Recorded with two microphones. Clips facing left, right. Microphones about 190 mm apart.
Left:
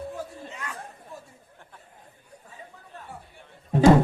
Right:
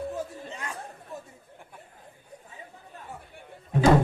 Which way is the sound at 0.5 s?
30° right (ahead or behind).